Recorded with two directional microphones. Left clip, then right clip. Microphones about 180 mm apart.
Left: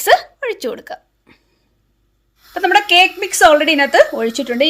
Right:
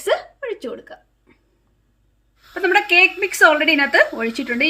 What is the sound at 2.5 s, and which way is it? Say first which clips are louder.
A woman's voice: left 4 dB; 50° left (ahead or behind).